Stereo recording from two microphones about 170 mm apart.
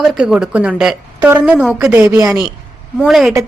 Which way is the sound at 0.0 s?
Centre (ahead or behind).